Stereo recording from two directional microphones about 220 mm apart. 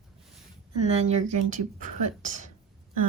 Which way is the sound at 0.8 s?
30° right (ahead or behind).